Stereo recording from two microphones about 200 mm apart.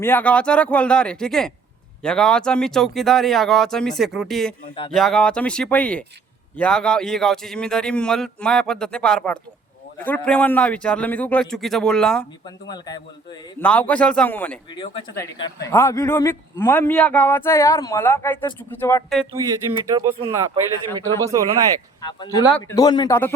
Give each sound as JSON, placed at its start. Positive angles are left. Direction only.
{"t": 0.0, "sound": "a man's voice", "side_deg": 10}
{"t": 12.5, "sound": "speech", "side_deg": 20}
{"t": 13.6, "sound": "a man's voice", "side_deg": 5}
{"t": 14.7, "sound": "a man's voice", "side_deg": 20}
{"t": 19.9, "sound": "speech", "side_deg": -20}
{"t": 22.0, "sound": "a man's voice", "side_deg": 20}